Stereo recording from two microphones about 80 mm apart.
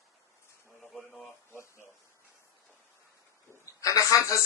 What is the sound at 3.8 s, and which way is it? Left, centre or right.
Speech, left.